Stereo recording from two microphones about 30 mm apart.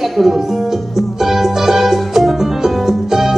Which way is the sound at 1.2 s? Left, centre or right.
Centre.